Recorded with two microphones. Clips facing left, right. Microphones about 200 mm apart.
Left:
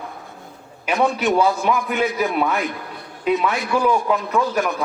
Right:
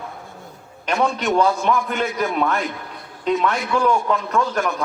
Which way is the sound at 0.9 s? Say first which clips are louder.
Left 1 dB; 15° left (ahead or behind).